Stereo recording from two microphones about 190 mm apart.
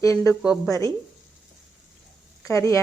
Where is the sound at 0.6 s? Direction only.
15° left (ahead or behind).